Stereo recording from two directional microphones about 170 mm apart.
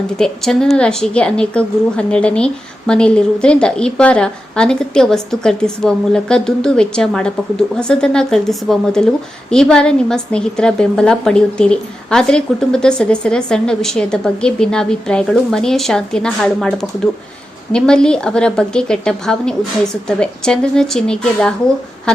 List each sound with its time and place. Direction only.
0.2 s a woman's voice: 5° left (ahead or behind)